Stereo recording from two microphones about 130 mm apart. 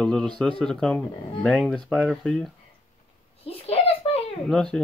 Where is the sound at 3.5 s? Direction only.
50° left (ahead or behind).